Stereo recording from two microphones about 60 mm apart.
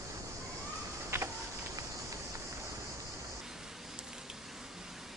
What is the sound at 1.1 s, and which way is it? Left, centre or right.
Insect, right.